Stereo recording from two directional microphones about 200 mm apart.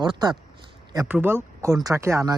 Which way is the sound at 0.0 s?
20° right (ahead or behind).